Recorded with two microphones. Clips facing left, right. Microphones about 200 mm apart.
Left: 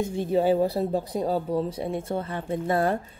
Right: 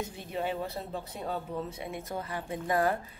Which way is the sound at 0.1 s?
30° left (ahead or behind).